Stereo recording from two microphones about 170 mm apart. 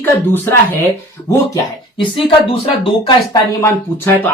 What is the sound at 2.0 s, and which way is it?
Speech, 30° left (ahead or behind).